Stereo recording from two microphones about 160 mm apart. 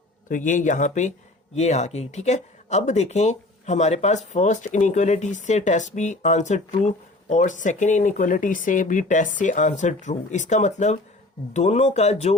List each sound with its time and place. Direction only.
0.3 s speech: 55° left (ahead or behind)